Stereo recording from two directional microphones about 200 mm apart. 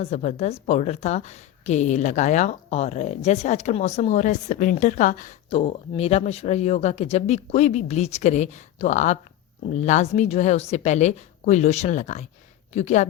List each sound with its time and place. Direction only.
0.0 s speech: 30° left (ahead or behind)
5.5 s speech: 25° left (ahead or behind)